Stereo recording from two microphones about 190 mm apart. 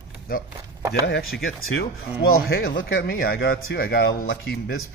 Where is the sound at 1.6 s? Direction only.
90° left.